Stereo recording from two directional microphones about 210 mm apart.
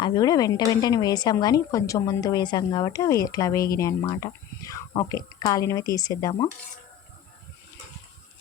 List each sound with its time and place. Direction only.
0.0 s a woman's voice: 20° left (ahead or behind)